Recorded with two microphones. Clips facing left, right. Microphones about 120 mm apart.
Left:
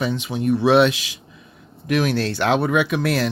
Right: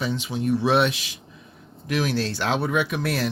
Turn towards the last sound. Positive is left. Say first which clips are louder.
# left 4 dB
turn(degrees=85)